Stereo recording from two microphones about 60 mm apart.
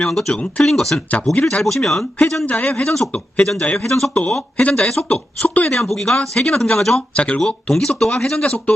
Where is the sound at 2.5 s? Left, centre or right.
Left.